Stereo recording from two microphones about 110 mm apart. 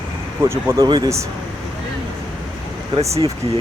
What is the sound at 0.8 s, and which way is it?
Speech, 40° right (ahead or behind).